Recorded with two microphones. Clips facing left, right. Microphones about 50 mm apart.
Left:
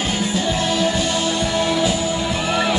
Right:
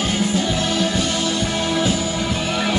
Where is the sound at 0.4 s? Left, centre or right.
Left.